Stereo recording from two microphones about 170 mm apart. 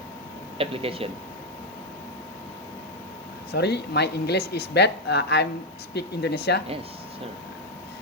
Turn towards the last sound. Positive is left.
turn(degrees=75)  # may be behind; listen again after turning